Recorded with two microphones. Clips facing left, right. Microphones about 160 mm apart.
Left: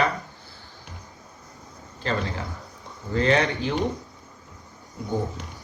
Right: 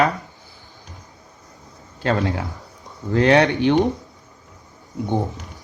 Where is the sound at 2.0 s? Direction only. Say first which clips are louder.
Right 7 dB; 75° right (ahead or behind).